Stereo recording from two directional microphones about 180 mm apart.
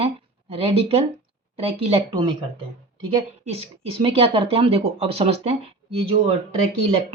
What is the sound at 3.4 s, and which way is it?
Speech, 35° right (ahead or behind).